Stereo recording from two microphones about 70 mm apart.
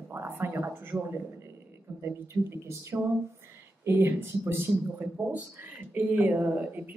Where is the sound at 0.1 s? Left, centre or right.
Right.